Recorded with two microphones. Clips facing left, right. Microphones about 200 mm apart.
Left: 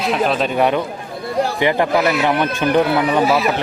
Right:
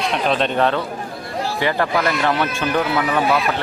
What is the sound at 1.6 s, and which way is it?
Speech, 20° left (ahead or behind).